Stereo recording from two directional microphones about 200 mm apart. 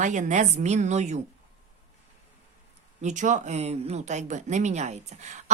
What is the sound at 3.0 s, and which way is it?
A woman's voice, 35° right (ahead or behind).